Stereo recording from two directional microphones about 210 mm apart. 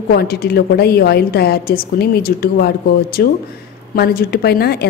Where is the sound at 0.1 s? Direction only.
45° left (ahead or behind).